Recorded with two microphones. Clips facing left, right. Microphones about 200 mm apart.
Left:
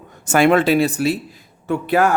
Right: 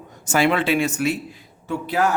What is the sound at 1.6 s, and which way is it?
Speech, 60° left (ahead or behind).